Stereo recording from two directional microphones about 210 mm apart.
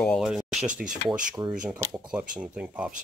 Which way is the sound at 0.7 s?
35° right (ahead or behind).